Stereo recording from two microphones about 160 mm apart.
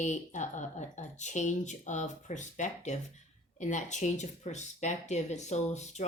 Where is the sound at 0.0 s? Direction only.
50° left (ahead or behind).